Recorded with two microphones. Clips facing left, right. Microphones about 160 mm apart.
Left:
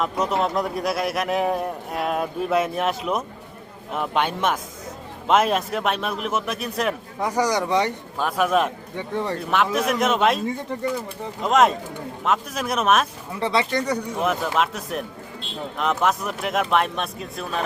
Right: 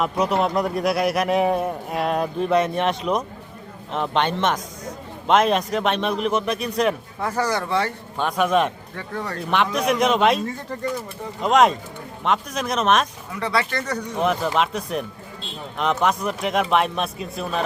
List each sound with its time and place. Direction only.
0.0 s a man's voice: centre (ahead or behind)
7.2 s speech: 15° left (ahead or behind)
8.2 s a man's voice: 5° left (ahead or behind)
9.0 s speech: 25° left (ahead or behind)
9.7 s a man's voice: centre (ahead or behind)
11.4 s a man's voice: centre (ahead or behind)
13.3 s a man's voice: 25° left (ahead or behind); by 17.6 s centre (ahead or behind)